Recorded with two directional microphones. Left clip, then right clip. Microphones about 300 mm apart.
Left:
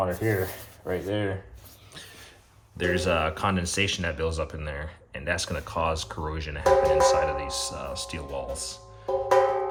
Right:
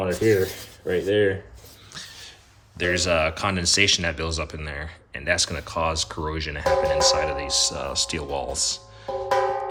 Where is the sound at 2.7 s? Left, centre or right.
Centre.